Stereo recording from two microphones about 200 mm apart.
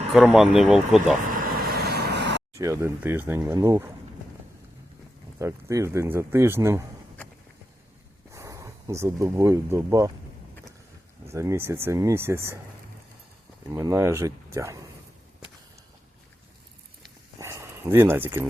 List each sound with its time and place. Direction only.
0.1 s speech: centre (ahead or behind)
1.3 s vehicle: 45° right (ahead or behind)
2.6 s speech: 15° right (ahead or behind)
5.4 s speech: 15° right (ahead or behind)
8.3 s speech: 15° right (ahead or behind)
11.3 s speech: 15° right (ahead or behind)
13.7 s speech: 15° right (ahead or behind)
17.4 s dog: 15° right (ahead or behind)